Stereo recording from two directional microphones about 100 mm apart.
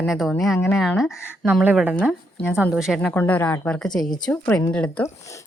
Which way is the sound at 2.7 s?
5° right (ahead or behind).